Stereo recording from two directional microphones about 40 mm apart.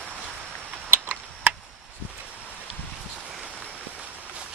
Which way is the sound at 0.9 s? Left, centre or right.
Right.